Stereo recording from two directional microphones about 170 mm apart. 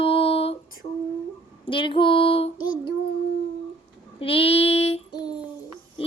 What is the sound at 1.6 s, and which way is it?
Female singing, 30° left (ahead or behind).